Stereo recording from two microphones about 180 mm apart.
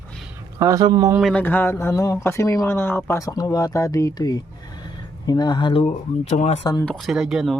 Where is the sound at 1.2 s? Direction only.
5° left (ahead or behind); by 6.7 s 35° left (ahead or behind).